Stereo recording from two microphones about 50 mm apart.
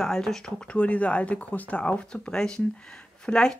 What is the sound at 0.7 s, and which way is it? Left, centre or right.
Speech, left.